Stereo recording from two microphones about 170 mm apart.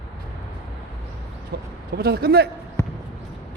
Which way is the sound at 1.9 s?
65° right (ahead or behind).